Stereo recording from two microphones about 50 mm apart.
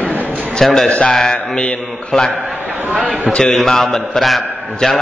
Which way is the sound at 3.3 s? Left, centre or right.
Centre.